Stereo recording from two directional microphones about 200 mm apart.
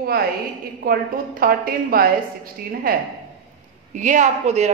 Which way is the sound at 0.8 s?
45° right (ahead or behind).